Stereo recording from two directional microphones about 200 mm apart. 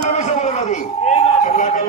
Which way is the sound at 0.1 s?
35° left (ahead or behind).